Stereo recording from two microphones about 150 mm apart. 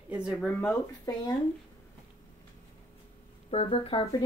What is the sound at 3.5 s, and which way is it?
Speech, 40° left (ahead or behind).